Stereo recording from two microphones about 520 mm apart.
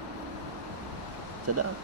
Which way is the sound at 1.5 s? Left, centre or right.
Right.